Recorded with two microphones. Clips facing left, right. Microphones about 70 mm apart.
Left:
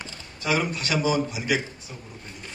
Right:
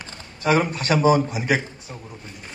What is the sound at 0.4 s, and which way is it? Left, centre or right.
A man's voice, right.